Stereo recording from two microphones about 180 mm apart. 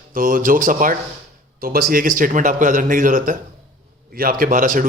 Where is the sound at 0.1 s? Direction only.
50° right (ahead or behind).